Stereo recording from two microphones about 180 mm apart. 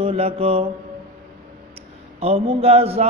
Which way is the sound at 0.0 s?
35° right (ahead or behind).